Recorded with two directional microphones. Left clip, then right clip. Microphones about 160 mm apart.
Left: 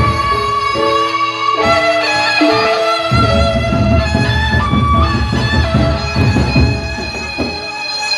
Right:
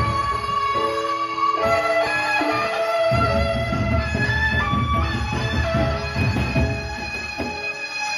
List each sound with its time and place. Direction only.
1.6 s music: 35° right (ahead or behind)